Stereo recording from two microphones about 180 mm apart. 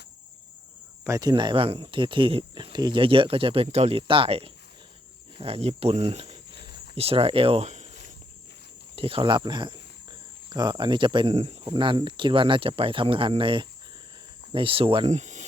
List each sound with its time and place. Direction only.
1.0 s speech: 20° right (ahead or behind); by 15.4 s 40° right (ahead or behind)